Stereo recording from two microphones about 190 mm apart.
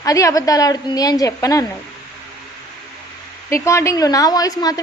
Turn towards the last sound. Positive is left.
turn(degrees=20)  # may be behind; listen again after turning